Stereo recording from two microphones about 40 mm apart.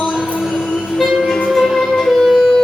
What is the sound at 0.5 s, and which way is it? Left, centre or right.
Music, centre.